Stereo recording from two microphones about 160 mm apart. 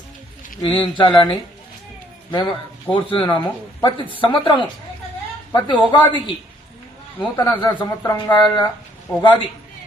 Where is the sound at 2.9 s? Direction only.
30° left (ahead or behind).